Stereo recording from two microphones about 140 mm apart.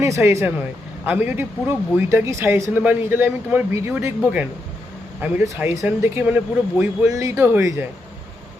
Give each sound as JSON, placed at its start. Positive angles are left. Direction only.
{"t": 0.0, "sound": "speech", "side_deg": -20}